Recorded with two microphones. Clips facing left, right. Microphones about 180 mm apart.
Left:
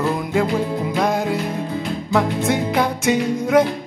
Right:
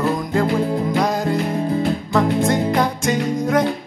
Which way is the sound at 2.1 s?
5° left (ahead or behind).